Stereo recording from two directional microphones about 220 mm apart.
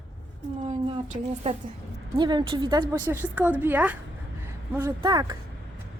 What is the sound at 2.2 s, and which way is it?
Speech, 20° right (ahead or behind).